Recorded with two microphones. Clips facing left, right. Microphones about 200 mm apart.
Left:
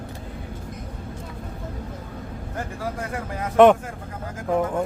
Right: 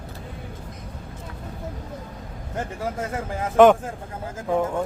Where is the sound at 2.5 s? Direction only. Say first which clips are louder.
Right 2 dB; 20° right (ahead or behind).